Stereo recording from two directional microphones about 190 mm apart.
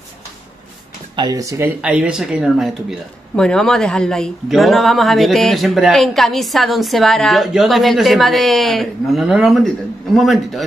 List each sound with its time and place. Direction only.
1.1 s speech: 20° right (ahead or behind)
1.8 s speech: 5° right (ahead or behind)